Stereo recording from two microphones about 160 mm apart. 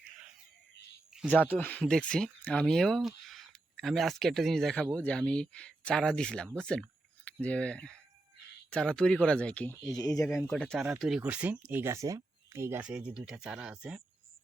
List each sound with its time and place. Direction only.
1.3 s speech: 10° left (ahead or behind)
9.8 s speech: 25° left (ahead or behind)
10.5 s speech: 5° left (ahead or behind)